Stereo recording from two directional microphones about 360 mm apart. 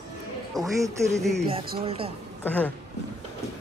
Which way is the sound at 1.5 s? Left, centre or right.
Centre.